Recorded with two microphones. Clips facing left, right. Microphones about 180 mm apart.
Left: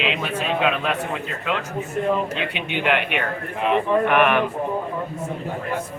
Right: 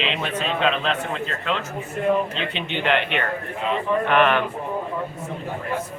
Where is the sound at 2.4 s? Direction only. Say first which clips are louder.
Left 1 dB; 10° left (ahead or behind).